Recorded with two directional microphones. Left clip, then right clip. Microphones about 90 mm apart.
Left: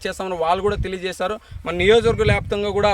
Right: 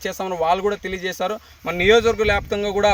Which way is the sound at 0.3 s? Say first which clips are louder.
Even; 20° right (ahead or behind).